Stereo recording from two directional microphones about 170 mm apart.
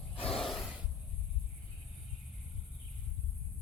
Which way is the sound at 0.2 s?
35° left (ahead or behind).